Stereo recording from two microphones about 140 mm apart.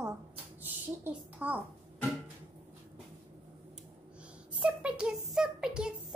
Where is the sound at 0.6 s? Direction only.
10° right (ahead or behind).